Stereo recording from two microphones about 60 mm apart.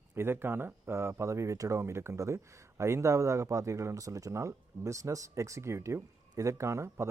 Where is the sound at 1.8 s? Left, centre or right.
Right.